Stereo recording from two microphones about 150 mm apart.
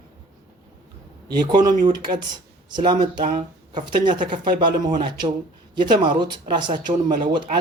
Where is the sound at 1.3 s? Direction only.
30° right (ahead or behind).